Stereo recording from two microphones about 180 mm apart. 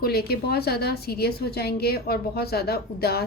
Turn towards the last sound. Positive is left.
turn(degrees=60)  # may be behind; listen again after turning